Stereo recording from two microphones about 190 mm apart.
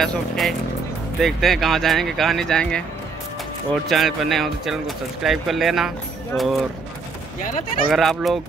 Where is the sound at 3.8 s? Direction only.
Centre (ahead or behind).